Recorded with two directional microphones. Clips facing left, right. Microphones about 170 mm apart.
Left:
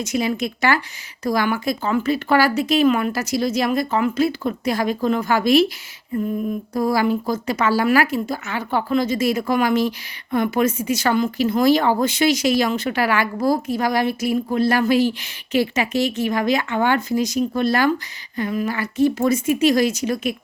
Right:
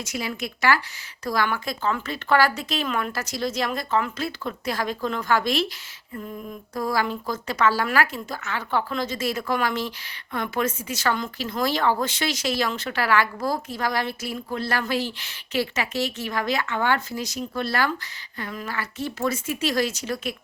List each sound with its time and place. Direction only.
0.0 s speech: 20° left (ahead or behind)
6.7 s speech: 10° left (ahead or behind)